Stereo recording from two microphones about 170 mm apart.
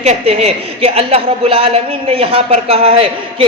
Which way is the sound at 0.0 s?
40° right (ahead or behind).